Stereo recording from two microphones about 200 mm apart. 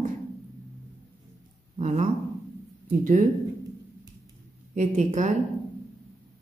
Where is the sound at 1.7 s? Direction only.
35° right (ahead or behind).